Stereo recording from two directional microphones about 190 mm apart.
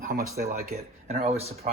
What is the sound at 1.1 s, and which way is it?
Speech, 35° right (ahead or behind).